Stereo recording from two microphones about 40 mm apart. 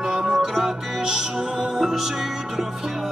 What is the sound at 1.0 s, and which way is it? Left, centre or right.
Music, centre.